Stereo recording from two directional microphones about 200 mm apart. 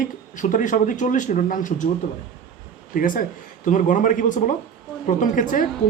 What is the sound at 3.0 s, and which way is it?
A woman's voice, 45° left (ahead or behind).